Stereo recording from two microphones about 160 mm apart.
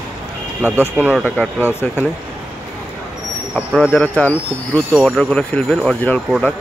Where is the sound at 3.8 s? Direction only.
10° left (ahead or behind).